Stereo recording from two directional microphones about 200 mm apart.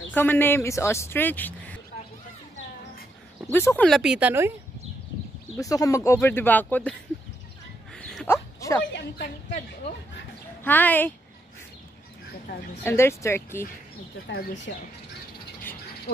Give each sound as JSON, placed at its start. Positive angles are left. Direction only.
{"t": 0.1, "sound": "speech", "side_deg": 10}
{"t": 3.5, "sound": "speech", "side_deg": 10}
{"t": 5.6, "sound": "speech", "side_deg": 15}
{"t": 7.9, "sound": "a sound", "side_deg": 5}
{"t": 8.5, "sound": "a sound", "side_deg": 15}
{"t": 9.5, "sound": "a woman's voice", "side_deg": 35}
{"t": 10.6, "sound": "speech", "side_deg": 10}
{"t": 12.8, "sound": "speech", "side_deg": 15}